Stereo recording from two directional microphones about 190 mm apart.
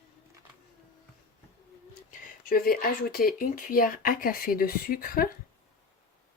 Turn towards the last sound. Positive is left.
turn(degrees=50)  # may be behind; listen again after turning